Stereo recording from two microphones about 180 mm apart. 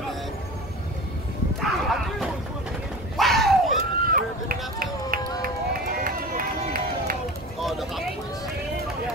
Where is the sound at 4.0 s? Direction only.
50° right (ahead or behind).